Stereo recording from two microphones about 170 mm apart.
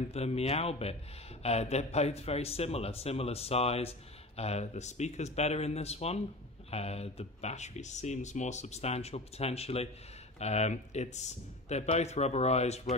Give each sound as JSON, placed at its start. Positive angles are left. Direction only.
{"t": 0.1, "sound": "speech", "side_deg": 40}